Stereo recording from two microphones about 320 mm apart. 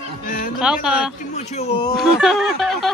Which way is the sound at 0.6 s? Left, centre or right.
Centre.